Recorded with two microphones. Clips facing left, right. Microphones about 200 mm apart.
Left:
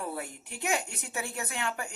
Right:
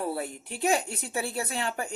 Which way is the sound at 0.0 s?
30° right (ahead or behind).